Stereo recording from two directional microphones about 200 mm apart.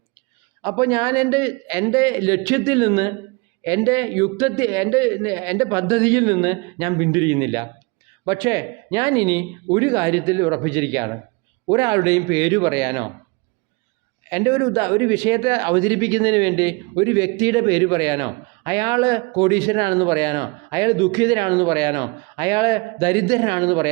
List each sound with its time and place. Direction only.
0.6 s a man's voice: 15° right (ahead or behind)
14.3 s speech: 15° right (ahead or behind)